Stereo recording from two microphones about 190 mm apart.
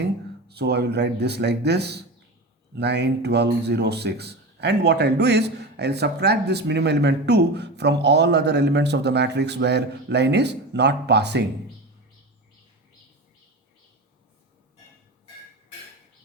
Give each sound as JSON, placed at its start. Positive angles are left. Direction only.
{"t": 0.4, "sound": "speech", "side_deg": -60}